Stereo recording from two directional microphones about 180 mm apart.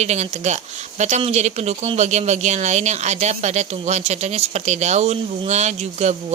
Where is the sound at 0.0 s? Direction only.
40° right (ahead or behind).